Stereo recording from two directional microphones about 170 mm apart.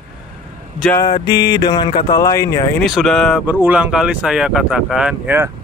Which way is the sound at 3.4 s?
10° right (ahead or behind).